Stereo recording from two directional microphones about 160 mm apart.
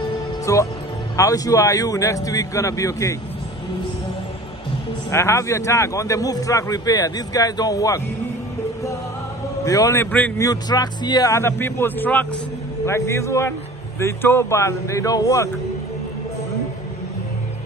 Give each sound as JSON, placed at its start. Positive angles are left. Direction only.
{"t": 0.5, "sound": "a man's voice", "side_deg": 20}
{"t": 5.1, "sound": "a man's voice", "side_deg": 15}
{"t": 9.7, "sound": "a man's voice", "side_deg": 20}
{"t": 10.4, "sound": "a man's voice", "side_deg": 25}